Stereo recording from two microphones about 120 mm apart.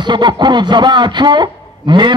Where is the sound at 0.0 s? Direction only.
40° right (ahead or behind).